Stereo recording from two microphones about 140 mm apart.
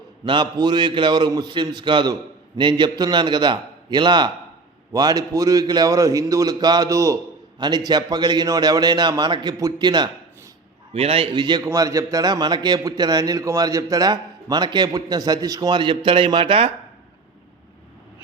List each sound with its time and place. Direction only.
0.3 s a man's voice: 30° right (ahead or behind)
10.9 s a man's voice: 45° right (ahead or behind)